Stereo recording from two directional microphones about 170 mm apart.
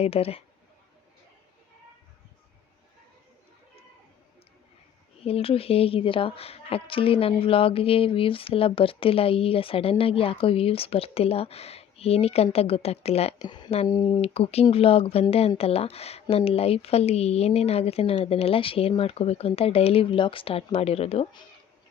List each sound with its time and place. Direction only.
0.0 s a woman's voice: 35° left (ahead or behind)
5.2 s a woman's voice: 35° left (ahead or behind)
13.4 s a woman's voice: 25° left (ahead or behind)